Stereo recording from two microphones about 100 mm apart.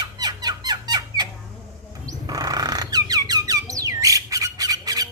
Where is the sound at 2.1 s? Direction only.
40° right (ahead or behind).